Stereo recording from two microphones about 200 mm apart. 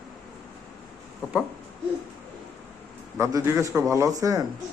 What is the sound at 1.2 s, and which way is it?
Owl, 15° left (ahead or behind).